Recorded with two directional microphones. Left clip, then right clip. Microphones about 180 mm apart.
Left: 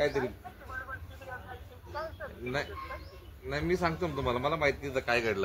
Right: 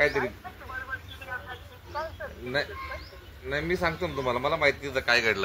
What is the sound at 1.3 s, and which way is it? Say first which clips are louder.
Vehicle: right 8 dB; 45° left (ahead or behind).